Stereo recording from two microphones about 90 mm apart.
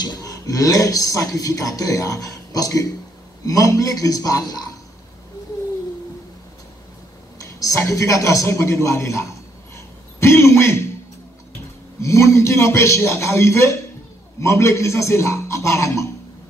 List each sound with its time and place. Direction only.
0.0 s a man's voice: 45° left (ahead or behind)
7.4 s a man's voice: 35° left (ahead or behind)
9.8 s throat clearing: 30° left (ahead or behind)
12.0 s a man's voice: 30° left (ahead or behind)